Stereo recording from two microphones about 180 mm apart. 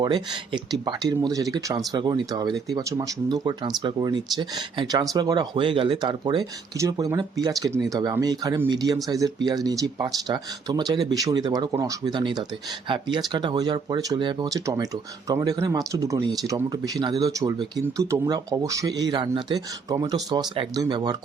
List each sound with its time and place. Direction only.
0.0 s speech: 25° right (ahead or behind)